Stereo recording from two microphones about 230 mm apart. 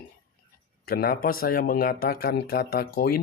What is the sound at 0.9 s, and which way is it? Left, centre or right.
Speech, left.